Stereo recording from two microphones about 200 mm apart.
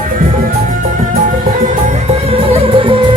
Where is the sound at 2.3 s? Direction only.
30° right (ahead or behind).